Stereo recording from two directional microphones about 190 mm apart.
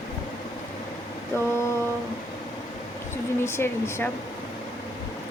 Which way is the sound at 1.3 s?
15° left (ahead or behind).